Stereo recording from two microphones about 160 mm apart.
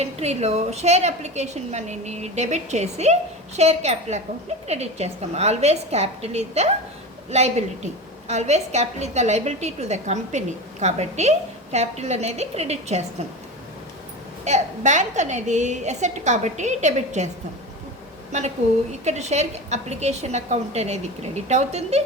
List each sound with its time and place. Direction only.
0.0 s a woman's voice: 40° right (ahead or behind)
14.4 s a woman's voice: 45° right (ahead or behind)
18.3 s a woman's voice: 45° right (ahead or behind)